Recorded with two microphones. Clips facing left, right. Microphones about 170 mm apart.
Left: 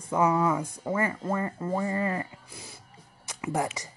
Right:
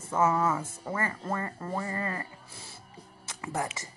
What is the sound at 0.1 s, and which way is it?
Speech, 15° left (ahead or behind).